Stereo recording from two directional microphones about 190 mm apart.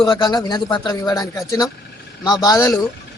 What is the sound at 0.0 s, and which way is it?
Speech, 20° left (ahead or behind).